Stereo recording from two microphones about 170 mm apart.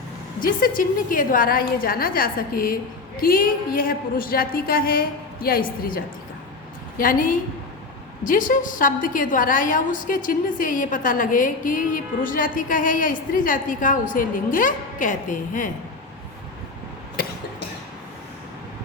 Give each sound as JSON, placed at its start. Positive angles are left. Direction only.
{"t": 0.3, "sound": "a woman's voice", "side_deg": 55}